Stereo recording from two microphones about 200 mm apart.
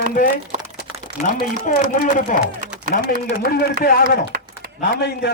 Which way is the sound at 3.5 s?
50° left (ahead or behind).